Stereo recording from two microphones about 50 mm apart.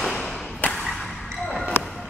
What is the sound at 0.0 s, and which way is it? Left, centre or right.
Thump, centre.